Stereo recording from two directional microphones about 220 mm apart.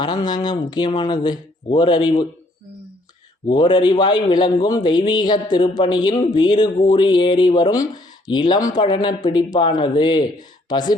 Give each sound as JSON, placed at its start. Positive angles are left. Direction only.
{"t": 0.0, "sound": "a man's voice", "side_deg": 20}
{"t": 3.4, "sound": "a man's voice", "side_deg": 20}